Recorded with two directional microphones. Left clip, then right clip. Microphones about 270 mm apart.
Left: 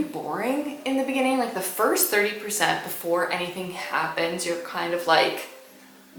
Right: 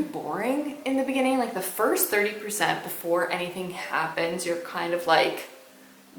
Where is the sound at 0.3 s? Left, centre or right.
Centre.